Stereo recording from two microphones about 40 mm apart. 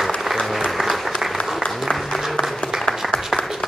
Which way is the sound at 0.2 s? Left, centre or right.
Centre.